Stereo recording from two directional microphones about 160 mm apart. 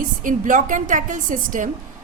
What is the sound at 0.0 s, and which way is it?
A woman's voice, 55° right (ahead or behind).